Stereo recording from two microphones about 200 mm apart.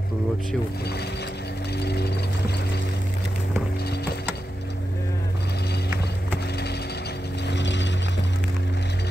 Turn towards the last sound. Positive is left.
turn(degrees=65)  # may be behind; listen again after turning